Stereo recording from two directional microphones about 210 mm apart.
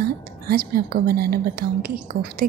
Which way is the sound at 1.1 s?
45° right (ahead or behind).